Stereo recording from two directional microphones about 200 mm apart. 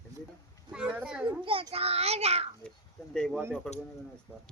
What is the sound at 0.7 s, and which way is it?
Speech, 5° right (ahead or behind).